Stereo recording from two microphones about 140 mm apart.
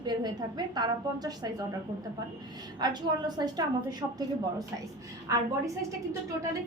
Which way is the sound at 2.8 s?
30° right (ahead or behind).